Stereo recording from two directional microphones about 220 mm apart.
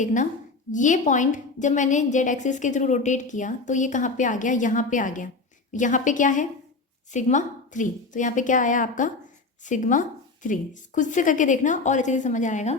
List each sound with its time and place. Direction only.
0.0 s a woman's voice: 35° left (ahead or behind)